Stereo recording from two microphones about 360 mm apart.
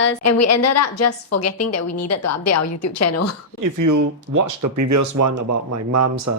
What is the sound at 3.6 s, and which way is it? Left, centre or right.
Speech, right.